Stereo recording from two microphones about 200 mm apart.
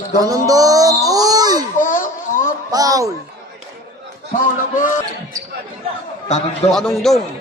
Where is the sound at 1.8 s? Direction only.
40° left (ahead or behind).